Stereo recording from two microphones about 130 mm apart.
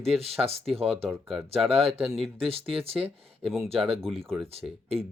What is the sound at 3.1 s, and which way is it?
Speech, 45° right (ahead or behind).